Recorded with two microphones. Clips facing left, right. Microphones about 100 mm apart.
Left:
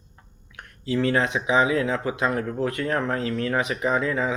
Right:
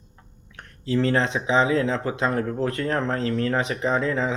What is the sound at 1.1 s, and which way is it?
Speech, 15° left (ahead or behind).